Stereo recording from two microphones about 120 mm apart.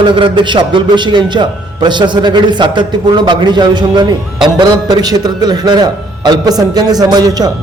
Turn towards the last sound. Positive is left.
turn(degrees=-35)  # may be behind; listen again after turning